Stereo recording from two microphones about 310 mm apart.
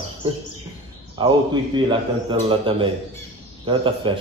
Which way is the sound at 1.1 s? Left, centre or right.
Centre.